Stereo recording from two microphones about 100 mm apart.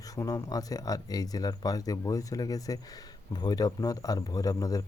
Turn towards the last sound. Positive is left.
turn(degrees=35)  # may be behind; listen again after turning